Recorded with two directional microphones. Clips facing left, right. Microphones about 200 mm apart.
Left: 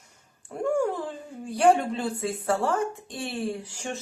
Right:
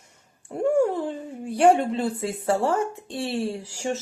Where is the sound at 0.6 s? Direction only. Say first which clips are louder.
Right 4 dB; 25° right (ahead or behind).